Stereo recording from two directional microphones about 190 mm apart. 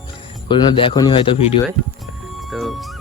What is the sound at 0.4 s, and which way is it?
Speech, 25° left (ahead or behind).